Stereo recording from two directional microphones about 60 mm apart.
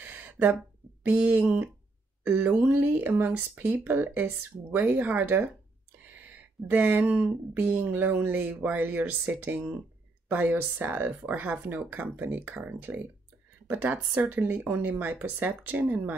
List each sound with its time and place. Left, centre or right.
0.0 s a sound: right
1.0 s speech: right
1.3 s speech: right